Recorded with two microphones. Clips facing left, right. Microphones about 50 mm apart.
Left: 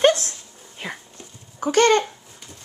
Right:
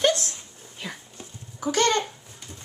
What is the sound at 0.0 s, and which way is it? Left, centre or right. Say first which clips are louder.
Dog: left 5 dB; left.